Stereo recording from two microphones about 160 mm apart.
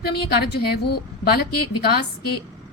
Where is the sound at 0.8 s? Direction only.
85° left.